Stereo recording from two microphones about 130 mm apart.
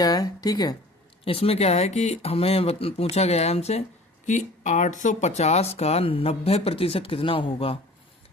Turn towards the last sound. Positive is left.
turn(degrees=45)  # may be behind; listen again after turning